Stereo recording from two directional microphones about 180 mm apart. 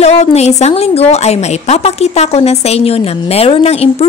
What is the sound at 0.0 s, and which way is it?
A woman's voice, 35° left (ahead or behind).